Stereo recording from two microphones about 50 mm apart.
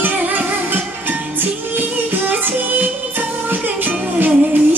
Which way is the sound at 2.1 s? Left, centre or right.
Right.